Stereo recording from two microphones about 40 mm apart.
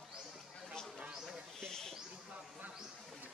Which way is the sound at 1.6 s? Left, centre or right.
Centre.